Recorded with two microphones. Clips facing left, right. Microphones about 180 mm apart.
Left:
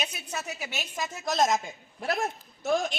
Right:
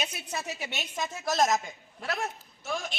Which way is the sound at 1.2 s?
20° left (ahead or behind).